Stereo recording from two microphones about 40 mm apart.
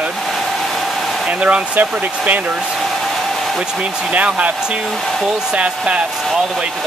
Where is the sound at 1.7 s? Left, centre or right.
Right.